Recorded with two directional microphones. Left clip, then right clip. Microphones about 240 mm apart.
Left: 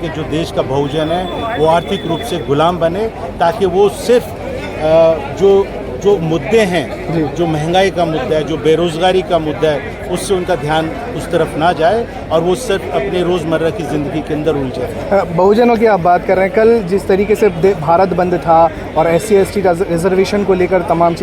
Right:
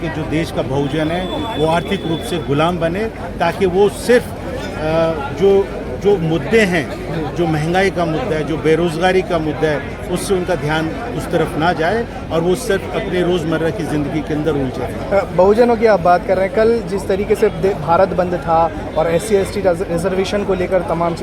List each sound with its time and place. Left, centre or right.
0.3 s a man's voice: centre
15.1 s speech: left